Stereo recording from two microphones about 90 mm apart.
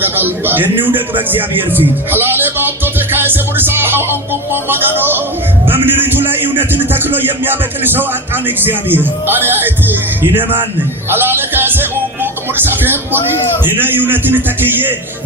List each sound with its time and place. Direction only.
0.0 s speech: 20° right (ahead or behind)